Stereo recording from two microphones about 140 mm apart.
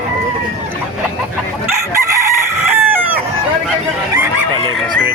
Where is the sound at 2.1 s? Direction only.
20° right (ahead or behind).